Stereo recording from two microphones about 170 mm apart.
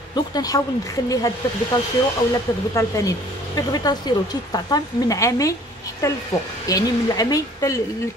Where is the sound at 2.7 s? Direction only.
20° left (ahead or behind).